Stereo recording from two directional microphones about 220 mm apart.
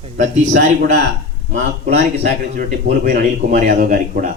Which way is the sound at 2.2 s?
45° right (ahead or behind).